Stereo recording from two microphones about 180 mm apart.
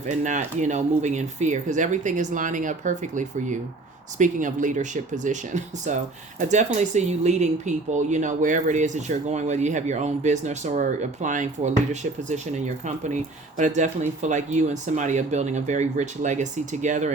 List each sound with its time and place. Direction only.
0.2 s speech: 45° right (ahead or behind)